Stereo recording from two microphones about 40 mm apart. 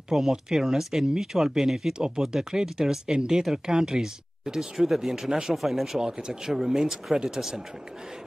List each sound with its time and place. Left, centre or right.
0.1 s speech: centre
2.0 s speech: centre
5.9 s speech: centre